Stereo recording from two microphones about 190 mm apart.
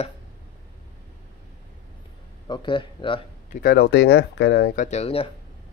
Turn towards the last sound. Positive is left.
turn(degrees=35)  # may be behind; listen again after turning